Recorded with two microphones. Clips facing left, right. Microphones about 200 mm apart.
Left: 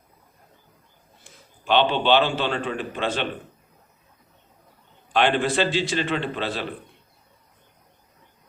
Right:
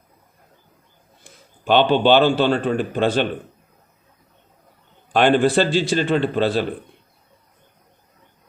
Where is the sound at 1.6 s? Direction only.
45° right (ahead or behind).